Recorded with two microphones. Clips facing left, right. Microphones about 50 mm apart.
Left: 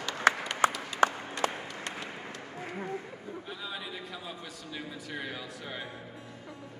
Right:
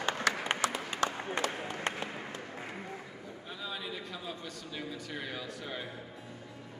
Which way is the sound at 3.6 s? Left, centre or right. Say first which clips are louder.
Right 4 dB; centre.